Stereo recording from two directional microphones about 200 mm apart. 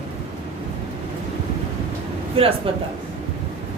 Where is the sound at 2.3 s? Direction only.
30° right (ahead or behind).